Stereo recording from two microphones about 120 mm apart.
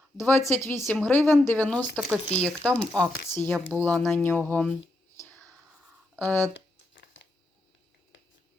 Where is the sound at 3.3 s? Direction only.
15° left (ahead or behind).